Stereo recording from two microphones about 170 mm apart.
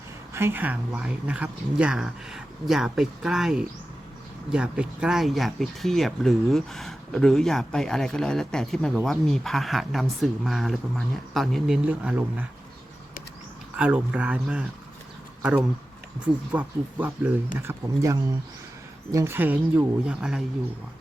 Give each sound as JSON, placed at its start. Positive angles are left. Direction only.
{"t": 0.3, "sound": "speech", "side_deg": -15}
{"t": 13.7, "sound": "speech", "side_deg": -5}